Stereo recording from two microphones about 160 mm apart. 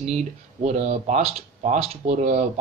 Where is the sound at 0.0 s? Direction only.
45° right (ahead or behind).